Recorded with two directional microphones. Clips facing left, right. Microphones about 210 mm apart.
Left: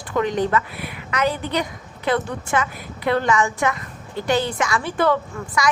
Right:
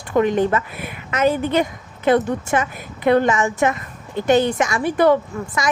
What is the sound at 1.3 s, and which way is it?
Speech, 50° right (ahead or behind).